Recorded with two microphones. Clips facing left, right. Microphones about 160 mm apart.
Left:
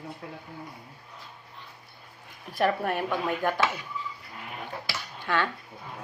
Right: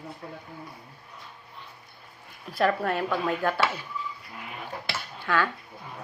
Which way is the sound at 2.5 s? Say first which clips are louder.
Right 1 dB; 15° left (ahead or behind).